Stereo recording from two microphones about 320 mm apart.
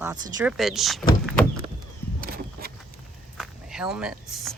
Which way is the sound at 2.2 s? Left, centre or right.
Right.